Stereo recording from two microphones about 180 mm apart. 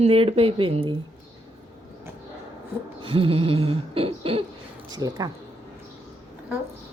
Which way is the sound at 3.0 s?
30° right (ahead or behind).